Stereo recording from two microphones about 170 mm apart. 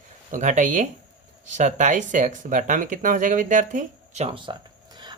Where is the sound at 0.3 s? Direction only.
45° right (ahead or behind).